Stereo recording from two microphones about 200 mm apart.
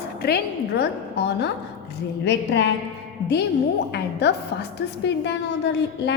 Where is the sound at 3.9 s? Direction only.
55° left (ahead or behind).